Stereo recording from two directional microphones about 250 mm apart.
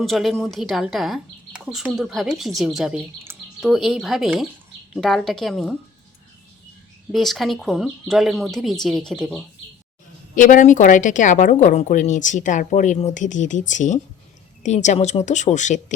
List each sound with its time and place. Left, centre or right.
0.0 s speech: centre
7.1 s speech: centre
10.3 s a woman's voice: left